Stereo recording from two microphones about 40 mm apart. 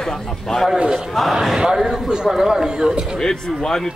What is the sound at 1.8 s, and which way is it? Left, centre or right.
Speech, centre.